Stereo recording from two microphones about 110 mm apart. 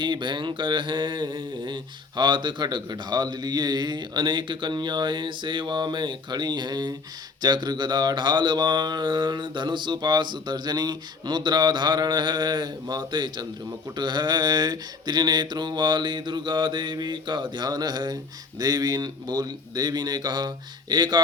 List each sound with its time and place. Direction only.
0.0 s mantra: 45° right (ahead or behind)